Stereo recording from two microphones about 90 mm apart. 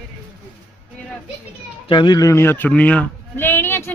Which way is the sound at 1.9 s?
60° left (ahead or behind).